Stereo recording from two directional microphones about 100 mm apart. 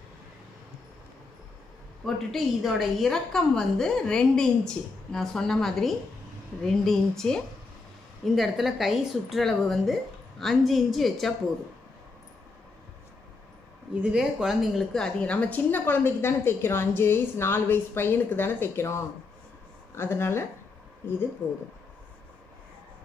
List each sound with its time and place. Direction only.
2.0 s a woman's voice: centre (ahead or behind)
14.0 s a woman's voice: 5° right (ahead or behind); by 20.4 s 25° left (ahead or behind)